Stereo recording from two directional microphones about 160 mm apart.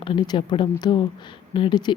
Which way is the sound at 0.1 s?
30° left (ahead or behind).